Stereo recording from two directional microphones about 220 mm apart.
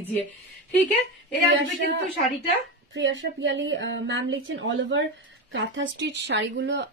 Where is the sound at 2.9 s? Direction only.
60° right (ahead or behind).